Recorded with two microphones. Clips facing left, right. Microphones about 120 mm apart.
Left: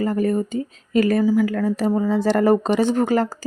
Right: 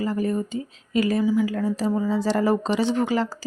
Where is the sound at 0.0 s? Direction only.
50° left (ahead or behind).